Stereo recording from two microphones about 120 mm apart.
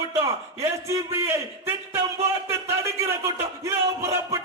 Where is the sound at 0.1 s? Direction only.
25° right (ahead or behind).